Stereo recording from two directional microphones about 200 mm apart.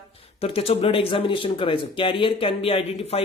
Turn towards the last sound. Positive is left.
turn(degrees=30)  # may be behind; listen again after turning